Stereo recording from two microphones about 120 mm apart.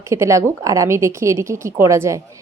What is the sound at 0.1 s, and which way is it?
Speech, 25° right (ahead or behind).